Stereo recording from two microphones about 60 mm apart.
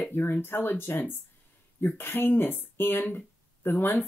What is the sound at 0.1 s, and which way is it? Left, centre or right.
Speech, left.